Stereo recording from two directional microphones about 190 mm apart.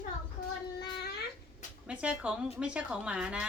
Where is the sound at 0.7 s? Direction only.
60° left (ahead or behind).